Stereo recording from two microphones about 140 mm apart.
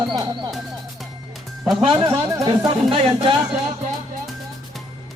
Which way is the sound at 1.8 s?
35° right (ahead or behind).